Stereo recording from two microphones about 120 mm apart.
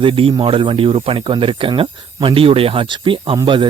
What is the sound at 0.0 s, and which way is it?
Speech, 50° right (ahead or behind).